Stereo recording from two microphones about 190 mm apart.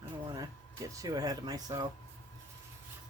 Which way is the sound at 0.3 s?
20° right (ahead or behind).